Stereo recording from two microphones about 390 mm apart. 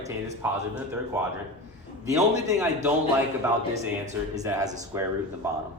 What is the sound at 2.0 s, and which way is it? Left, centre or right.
Speech, centre.